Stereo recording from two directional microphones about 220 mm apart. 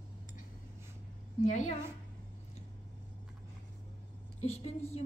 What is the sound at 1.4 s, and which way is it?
Speech, 35° left (ahead or behind).